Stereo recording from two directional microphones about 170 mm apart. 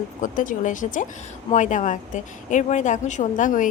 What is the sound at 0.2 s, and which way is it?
Speech, 50° left (ahead or behind).